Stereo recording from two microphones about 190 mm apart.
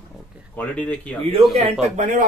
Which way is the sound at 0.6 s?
5° left (ahead or behind).